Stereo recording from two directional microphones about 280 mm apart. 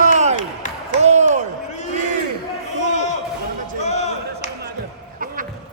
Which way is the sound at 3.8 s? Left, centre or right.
Left.